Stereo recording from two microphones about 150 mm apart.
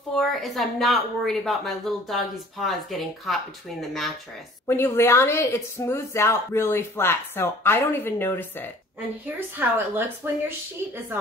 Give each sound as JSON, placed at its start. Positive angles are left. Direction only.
{"t": 0.1, "sound": "speech", "side_deg": 0}
{"t": 4.6, "sound": "a woman's voice", "side_deg": 15}
{"t": 9.6, "sound": "speech", "side_deg": -15}